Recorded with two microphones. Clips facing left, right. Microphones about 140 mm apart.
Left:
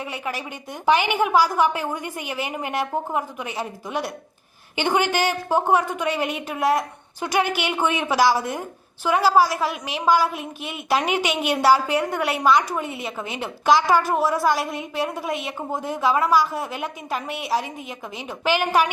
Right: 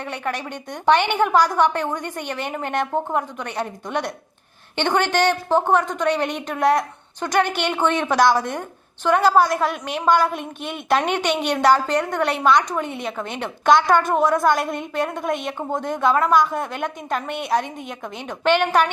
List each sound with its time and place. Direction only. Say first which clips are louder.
0.0 s a woman's voice: right 2 dB; 5° left (ahead or behind)